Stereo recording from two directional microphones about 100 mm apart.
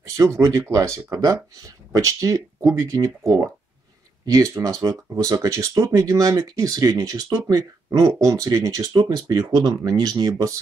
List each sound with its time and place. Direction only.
0.4 s speech: 35° right (ahead or behind)